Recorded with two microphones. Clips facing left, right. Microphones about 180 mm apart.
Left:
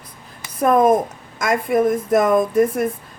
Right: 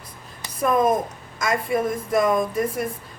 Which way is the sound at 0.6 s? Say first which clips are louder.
Left 5 dB; 55° left (ahead or behind).